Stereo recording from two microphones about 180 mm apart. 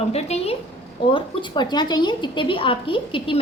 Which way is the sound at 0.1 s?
35° left (ahead or behind).